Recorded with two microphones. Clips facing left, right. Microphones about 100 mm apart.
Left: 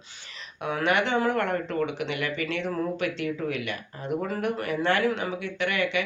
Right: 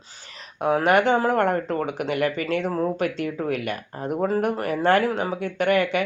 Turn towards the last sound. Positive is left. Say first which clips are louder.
# right 6 dB
turn(degrees=-45)  # may be behind; listen again after turning